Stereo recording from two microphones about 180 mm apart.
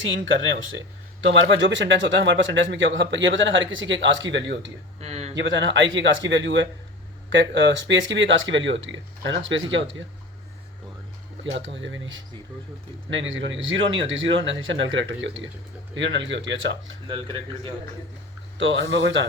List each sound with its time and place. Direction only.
0.0 s a man's voice: 90° right
4.9 s speech: 35° right (ahead or behind)
5.4 s a man's voice: 90° right
11.5 s a man's voice: 90° right
18.5 s speech: 85° right